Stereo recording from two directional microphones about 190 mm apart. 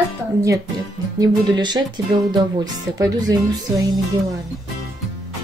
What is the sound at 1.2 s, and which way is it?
Speech, 20° right (ahead or behind).